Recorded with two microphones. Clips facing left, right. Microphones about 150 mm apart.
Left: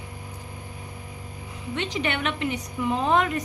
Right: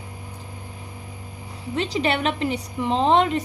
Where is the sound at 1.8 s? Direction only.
35° right (ahead or behind).